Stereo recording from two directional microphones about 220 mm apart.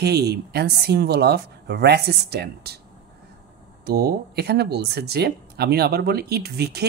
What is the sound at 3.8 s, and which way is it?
Speech, 45° right (ahead or behind).